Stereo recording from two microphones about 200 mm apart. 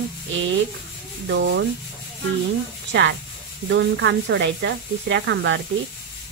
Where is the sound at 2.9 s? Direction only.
60° right (ahead or behind).